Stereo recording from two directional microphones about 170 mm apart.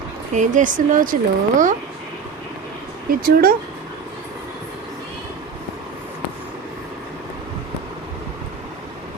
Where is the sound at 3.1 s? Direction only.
60° right (ahead or behind).